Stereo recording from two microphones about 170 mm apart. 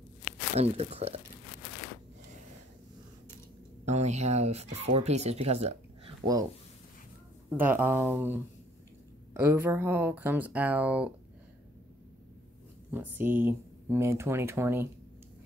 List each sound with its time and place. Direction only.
0.6 s speech: 40° right (ahead or behind)
3.8 s speech: 40° right (ahead or behind)
7.4 s speech: 10° right (ahead or behind)
12.9 s speech: 10° right (ahead or behind)